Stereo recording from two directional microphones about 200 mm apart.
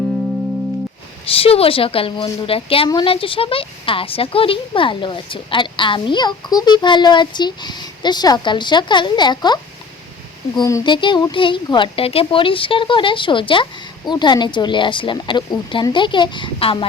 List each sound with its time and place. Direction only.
1.3 s a woman's voice: 30° left (ahead or behind)
10.6 s a woman's voice: 20° left (ahead or behind)